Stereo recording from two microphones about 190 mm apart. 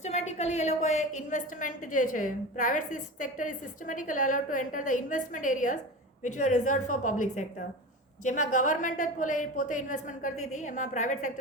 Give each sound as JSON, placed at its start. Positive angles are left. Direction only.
{"t": 0.0, "sound": "a woman's voice", "side_deg": 35}